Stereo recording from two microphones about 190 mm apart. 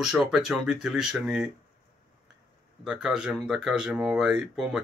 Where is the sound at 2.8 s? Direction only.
5° right (ahead or behind).